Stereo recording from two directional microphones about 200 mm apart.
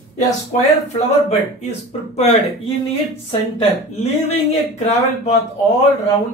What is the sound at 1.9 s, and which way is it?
A woman's voice, 30° left (ahead or behind).